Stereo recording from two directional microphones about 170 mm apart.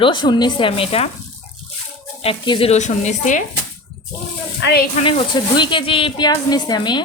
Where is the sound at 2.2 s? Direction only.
30° left (ahead or behind); by 3.4 s 45° left (ahead or behind).